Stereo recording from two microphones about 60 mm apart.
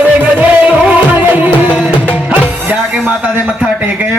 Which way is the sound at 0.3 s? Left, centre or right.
Right.